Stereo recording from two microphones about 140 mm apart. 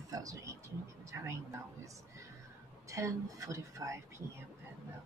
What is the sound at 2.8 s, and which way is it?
Speech, 20° right (ahead or behind).